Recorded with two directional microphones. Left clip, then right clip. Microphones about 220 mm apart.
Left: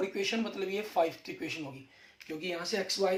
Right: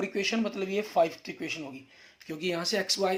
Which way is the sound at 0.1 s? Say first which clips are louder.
Right 3 dB; 40° right (ahead or behind).